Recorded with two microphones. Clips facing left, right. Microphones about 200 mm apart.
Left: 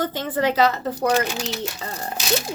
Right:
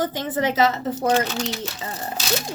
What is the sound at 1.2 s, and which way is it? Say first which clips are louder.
Speech: right 1 dB; 10° left (ahead or behind).